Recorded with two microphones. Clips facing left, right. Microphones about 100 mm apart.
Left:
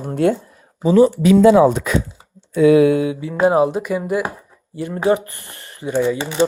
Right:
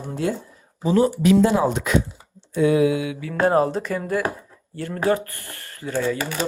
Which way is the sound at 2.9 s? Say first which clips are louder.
Left 7 dB; 35° left (ahead or behind).